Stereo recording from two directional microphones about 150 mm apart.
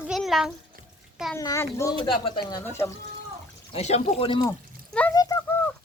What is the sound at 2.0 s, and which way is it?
Speech, 30° left (ahead or behind).